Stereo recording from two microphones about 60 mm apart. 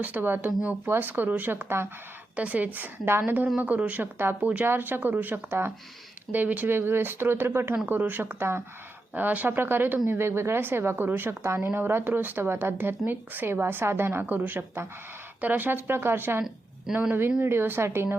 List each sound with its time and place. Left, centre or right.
0.0 s speech: right
2.3 s a woman's voice: right
3.6 s a woman's voice: right
4.4 s a woman's voice: right
4.6 s speech: right
9.1 s speech: right
11.4 s speech: right
16.9 s a woman's voice: right
17.4 s speech: right